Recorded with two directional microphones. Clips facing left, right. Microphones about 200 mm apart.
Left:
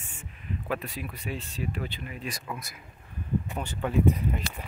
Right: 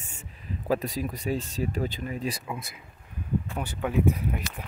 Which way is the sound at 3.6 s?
10° right (ahead or behind).